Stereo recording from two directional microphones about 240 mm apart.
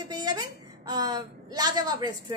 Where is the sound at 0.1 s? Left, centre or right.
Centre.